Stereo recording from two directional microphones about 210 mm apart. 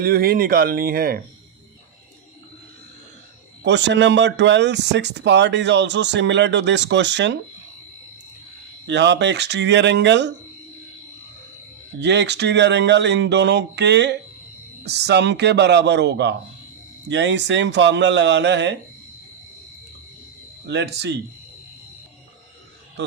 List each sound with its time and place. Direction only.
0.0 s speech: 45° right (ahead or behind)
3.6 s speech: 55° right (ahead or behind)
8.9 s speech: 55° right (ahead or behind)
11.9 s speech: 55° right (ahead or behind)
20.7 s speech: 55° right (ahead or behind)